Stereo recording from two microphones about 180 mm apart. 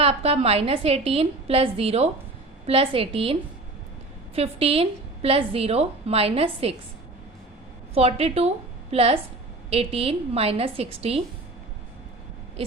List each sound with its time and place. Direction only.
0.0 s a woman's voice: 35° right (ahead or behind)
4.4 s a woman's voice: 35° right (ahead or behind)
7.9 s a woman's voice: 35° right (ahead or behind)